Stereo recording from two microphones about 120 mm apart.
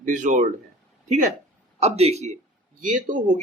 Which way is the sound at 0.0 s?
90° right.